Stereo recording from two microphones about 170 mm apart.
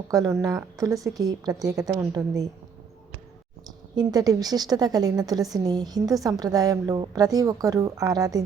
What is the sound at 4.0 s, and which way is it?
A woman's voice, 20° right (ahead or behind).